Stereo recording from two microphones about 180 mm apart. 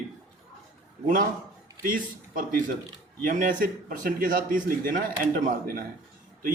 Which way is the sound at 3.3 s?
50° right (ahead or behind).